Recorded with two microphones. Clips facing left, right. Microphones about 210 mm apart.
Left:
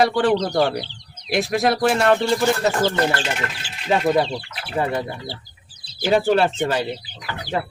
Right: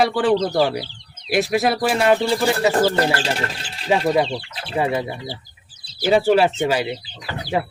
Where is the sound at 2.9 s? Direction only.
35° right (ahead or behind).